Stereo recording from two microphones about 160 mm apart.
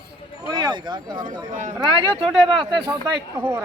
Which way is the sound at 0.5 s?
25° right (ahead or behind).